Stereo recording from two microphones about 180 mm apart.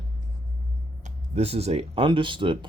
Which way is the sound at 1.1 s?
35° right (ahead or behind).